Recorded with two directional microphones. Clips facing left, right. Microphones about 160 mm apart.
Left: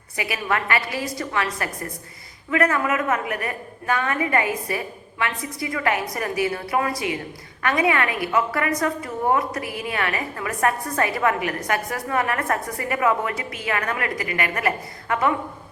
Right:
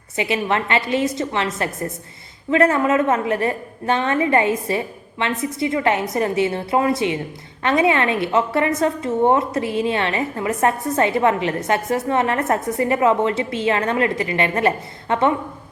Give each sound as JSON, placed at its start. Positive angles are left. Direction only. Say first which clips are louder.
{"t": 0.2, "sound": "a woman's voice", "louder": "right 5 dB", "side_deg": -25}